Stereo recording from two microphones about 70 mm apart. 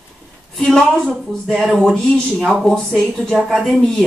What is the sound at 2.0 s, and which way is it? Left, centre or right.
Speech, centre.